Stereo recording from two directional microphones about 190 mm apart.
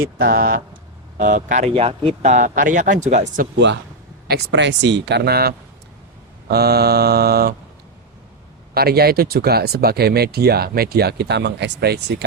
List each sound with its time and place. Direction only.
0.2 s speech: 50° right (ahead or behind)
4.3 s speech: 65° right (ahead or behind)
8.7 s speech: 55° right (ahead or behind)